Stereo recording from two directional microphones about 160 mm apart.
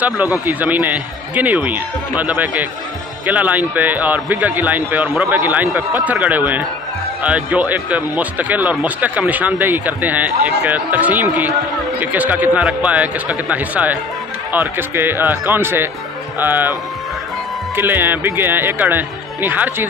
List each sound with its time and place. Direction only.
0.5 s speech: 10° right (ahead or behind)
17.7 s speech: 10° right (ahead or behind)